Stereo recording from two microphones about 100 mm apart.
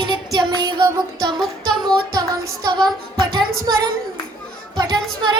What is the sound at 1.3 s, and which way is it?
Music, 5° left (ahead or behind).